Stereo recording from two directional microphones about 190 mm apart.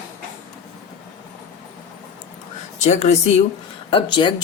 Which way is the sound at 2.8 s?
35° left (ahead or behind).